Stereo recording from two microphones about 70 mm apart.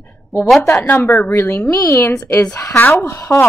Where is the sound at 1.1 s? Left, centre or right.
Left.